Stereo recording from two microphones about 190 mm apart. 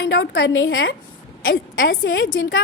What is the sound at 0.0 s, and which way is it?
A woman's voice, 75° left (ahead or behind).